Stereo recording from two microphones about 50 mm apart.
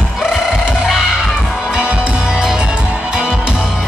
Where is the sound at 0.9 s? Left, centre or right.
Centre.